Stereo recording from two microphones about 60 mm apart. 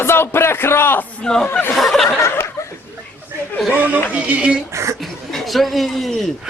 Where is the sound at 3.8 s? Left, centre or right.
Right.